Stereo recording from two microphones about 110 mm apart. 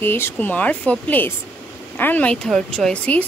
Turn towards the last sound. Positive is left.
turn(degrees=10)  # may be behind; listen again after turning